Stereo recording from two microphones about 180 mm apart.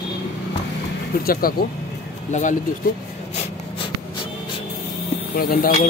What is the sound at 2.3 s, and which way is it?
Speech, 45° left (ahead or behind).